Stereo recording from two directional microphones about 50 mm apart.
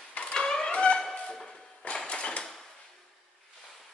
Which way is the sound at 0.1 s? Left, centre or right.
Centre.